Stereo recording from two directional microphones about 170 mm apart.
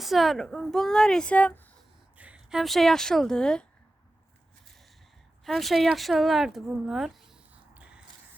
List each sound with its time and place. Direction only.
0.0 s a woman's voice: centre (ahead or behind)
2.1 s speech: 10° right (ahead or behind)
5.5 s speech: centre (ahead or behind)